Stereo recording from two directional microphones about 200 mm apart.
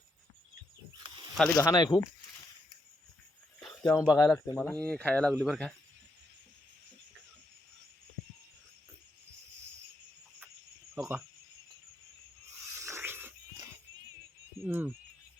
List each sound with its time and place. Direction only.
1.5 s speech: 20° left (ahead or behind)
3.6 s a sound: 5° left (ahead or behind)
4.0 s speech: 15° left (ahead or behind)
10.9 s speech: 10° right (ahead or behind)
12.8 s a sound: 15° right (ahead or behind)
14.6 s speech: 10° right (ahead or behind)